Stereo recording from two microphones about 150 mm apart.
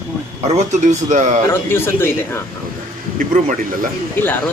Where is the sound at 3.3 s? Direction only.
60° right (ahead or behind).